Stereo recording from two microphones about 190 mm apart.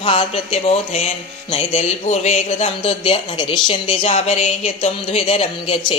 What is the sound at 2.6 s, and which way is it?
A woman's voice, 30° left (ahead or behind).